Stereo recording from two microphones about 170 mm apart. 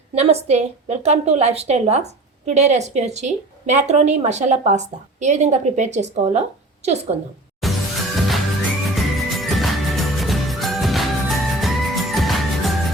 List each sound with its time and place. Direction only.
0.1 s a woman's voice: 35° right (ahead or behind)
7.6 s music: centre (ahead or behind)